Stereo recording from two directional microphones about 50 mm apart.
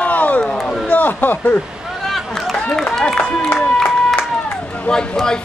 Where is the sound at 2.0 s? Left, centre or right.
Centre.